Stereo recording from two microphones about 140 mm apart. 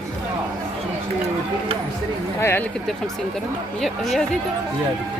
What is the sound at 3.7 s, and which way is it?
Speech, 5° left (ahead or behind).